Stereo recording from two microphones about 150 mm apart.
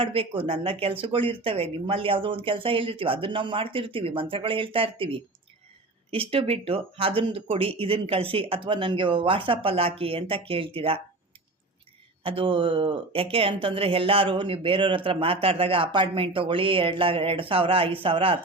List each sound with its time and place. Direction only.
0.0 s speech: 35° right (ahead or behind)
12.2 s speech: 35° right (ahead or behind)